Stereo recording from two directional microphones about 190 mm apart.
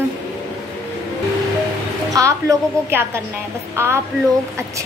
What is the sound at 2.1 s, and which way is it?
A woman's voice, 15° right (ahead or behind).